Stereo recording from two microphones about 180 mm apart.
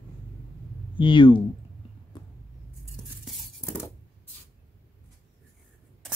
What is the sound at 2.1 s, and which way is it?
Vehicle, 25° left (ahead or behind).